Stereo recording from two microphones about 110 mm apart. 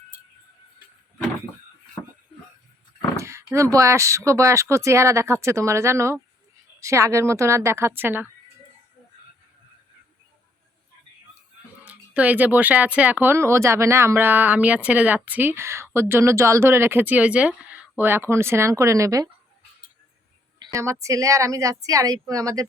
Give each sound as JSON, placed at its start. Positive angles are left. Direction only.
{"t": 2.0, "sound": "a sound", "side_deg": 20}
{"t": 3.2, "sound": "a woman's voice", "side_deg": -25}
{"t": 11.9, "sound": "a woman's voice", "side_deg": -15}
{"t": 20.7, "sound": "speech", "side_deg": -30}